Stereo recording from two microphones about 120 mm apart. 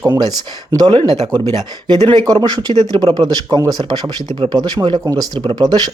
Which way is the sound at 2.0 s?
40° right (ahead or behind).